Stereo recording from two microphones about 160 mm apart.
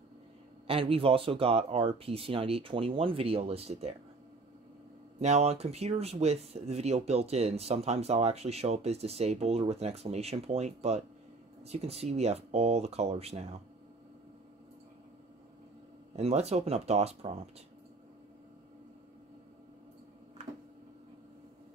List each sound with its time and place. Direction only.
0.7 s speech: 35° right (ahead or behind)
5.2 s speech: 40° right (ahead or behind)
16.2 s speech: 40° right (ahead or behind)